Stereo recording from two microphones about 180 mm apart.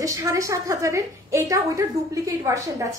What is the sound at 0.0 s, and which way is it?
A woman's voice, 20° right (ahead or behind).